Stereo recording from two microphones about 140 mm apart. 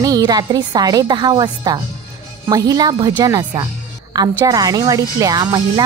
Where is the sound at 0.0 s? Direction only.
25° right (ahead or behind).